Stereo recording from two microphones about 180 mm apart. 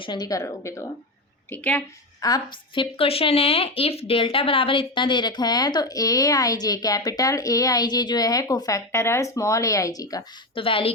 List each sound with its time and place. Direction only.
0.0 s a woman's voice: 25° left (ahead or behind)
2.2 s speech: 25° left (ahead or behind)